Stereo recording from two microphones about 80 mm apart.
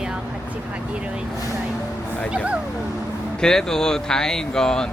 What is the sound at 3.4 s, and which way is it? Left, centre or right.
Speech, centre.